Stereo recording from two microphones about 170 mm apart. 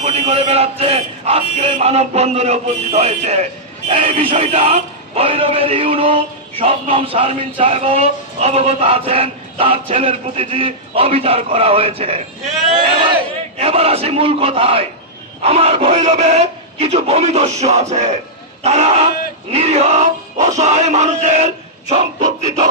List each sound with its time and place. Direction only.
0.0 s speech: 40° right (ahead or behind)
13.6 s speech: 35° right (ahead or behind)
19.5 s a sound: 40° right (ahead or behind)